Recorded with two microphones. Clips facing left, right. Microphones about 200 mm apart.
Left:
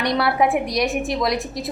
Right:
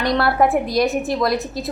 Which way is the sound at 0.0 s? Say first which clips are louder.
Right 2 dB; centre (ahead or behind).